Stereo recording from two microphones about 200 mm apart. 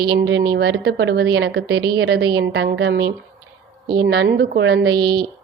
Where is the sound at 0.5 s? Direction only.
60° right (ahead or behind).